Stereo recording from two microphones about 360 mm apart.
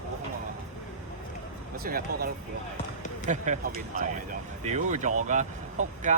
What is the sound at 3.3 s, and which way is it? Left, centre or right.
Speech, right.